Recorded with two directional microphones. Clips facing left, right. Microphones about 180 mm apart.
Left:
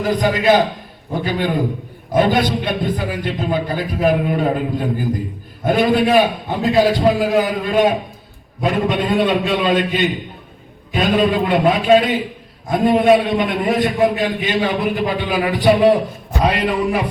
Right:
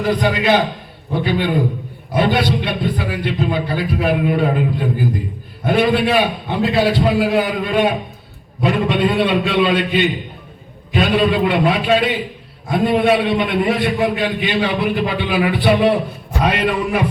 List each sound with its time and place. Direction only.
0.1 s a man's voice: 45° left (ahead or behind)